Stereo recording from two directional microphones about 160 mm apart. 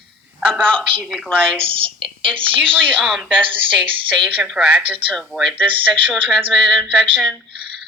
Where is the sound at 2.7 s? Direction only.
10° right (ahead or behind).